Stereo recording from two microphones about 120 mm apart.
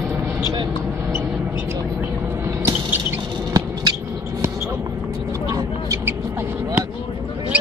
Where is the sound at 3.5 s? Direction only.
35° right (ahead or behind).